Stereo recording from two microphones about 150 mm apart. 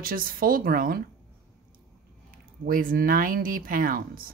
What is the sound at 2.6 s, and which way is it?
Speech, 70° right (ahead or behind).